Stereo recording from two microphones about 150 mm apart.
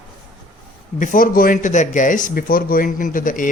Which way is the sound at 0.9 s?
60° left (ahead or behind).